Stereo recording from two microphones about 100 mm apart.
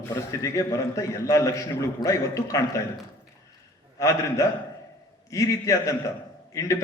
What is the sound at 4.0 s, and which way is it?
A man's voice, 30° left (ahead or behind).